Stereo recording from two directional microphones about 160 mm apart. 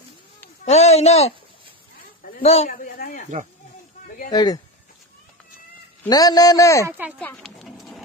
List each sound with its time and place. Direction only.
0.7 s a man's voice: 45° left (ahead or behind)
2.0 s a sound: 60° left (ahead or behind)
2.7 s speech: 60° left (ahead or behind)
4.3 s a man's voice: 25° left (ahead or behind)
6.0 s a man's voice: 25° left (ahead or behind)
6.9 s speech: 10° right (ahead or behind)
7.2 s a sound: 10° left (ahead or behind)